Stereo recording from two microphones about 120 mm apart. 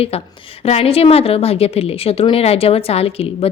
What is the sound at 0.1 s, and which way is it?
A woman's voice, 55° left (ahead or behind).